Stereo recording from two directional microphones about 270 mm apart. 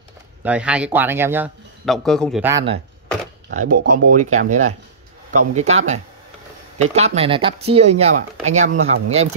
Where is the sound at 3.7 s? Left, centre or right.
Right.